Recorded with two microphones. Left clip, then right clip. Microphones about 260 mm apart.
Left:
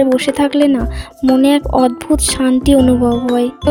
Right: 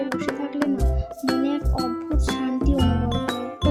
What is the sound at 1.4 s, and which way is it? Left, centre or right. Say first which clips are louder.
Music: left 14 dB; left.